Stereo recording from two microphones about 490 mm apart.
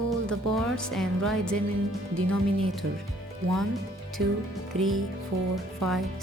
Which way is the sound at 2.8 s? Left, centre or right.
Right.